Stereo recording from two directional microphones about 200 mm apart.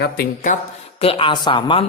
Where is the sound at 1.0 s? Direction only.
25° left (ahead or behind).